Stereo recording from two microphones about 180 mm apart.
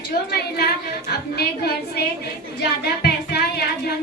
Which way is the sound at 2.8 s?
65° left (ahead or behind).